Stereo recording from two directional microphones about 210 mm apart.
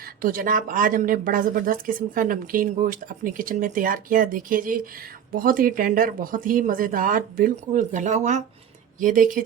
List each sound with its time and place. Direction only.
0.2 s speech: 40° right (ahead or behind)